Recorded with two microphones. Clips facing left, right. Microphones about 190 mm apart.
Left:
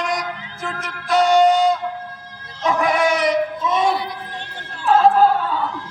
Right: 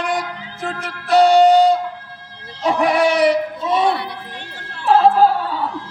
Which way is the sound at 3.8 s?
65° right (ahead or behind).